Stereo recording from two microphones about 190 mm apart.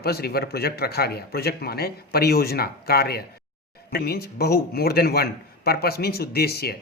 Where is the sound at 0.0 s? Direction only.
55° left (ahead or behind).